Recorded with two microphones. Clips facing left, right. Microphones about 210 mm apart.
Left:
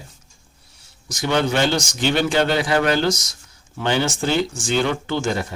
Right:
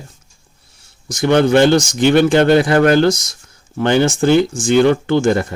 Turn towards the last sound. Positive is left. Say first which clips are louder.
# right 9 dB
turn(degrees=-55)  # may be behind; listen again after turning